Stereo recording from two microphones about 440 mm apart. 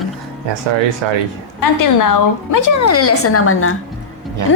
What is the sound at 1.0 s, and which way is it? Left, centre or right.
Speech, right.